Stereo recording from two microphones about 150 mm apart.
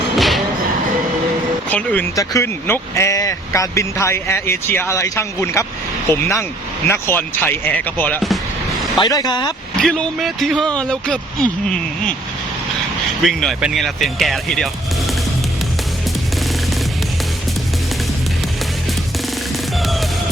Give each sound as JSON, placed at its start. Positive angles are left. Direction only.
{"t": 0.2, "sound": "music", "side_deg": 0}
{"t": 1.7, "sound": "speech", "side_deg": 10}
{"t": 9.0, "sound": "speech", "side_deg": 25}
{"t": 9.7, "sound": "speech", "side_deg": 5}
{"t": 13.2, "sound": "speech", "side_deg": 0}
{"t": 19.7, "sound": "music", "side_deg": 0}